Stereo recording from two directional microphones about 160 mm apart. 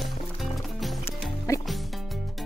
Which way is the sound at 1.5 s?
20° left (ahead or behind).